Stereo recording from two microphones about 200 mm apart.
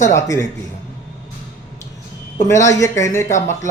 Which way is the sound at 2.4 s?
15° left (ahead or behind).